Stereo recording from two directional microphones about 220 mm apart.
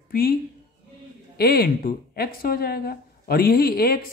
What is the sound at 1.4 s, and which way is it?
Speech, 45° left (ahead or behind).